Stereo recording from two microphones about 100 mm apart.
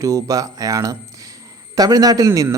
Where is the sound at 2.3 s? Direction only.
25° right (ahead or behind).